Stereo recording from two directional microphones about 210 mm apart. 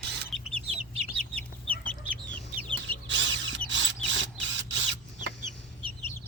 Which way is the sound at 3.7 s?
60° right (ahead or behind).